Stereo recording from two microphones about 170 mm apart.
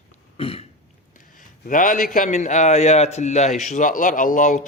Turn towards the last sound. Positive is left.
turn(degrees=50)  # may be behind; listen again after turning